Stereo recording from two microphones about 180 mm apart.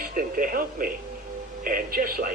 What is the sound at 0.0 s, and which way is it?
Speech, 50° right (ahead or behind).